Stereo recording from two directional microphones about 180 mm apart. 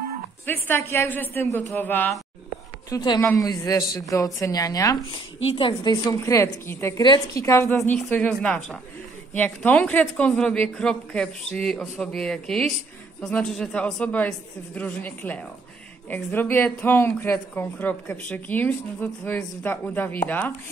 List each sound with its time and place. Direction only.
0.5 s speech: 15° left (ahead or behind)
2.9 s a woman's voice: 20° left (ahead or behind)
5.4 s a woman's voice: 30° left (ahead or behind)
5.9 s a woman's voice: 20° left (ahead or behind)